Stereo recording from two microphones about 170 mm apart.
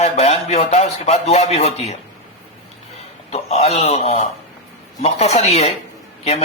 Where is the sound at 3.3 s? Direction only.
40° left (ahead or behind).